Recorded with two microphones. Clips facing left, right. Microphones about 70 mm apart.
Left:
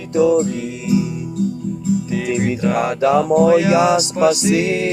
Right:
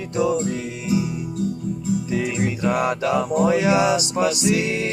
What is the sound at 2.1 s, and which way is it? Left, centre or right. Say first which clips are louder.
Music: left 4 dB; centre.